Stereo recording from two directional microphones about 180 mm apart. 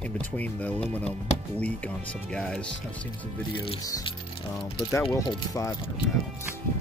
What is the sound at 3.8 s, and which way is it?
Speech, 20° left (ahead or behind).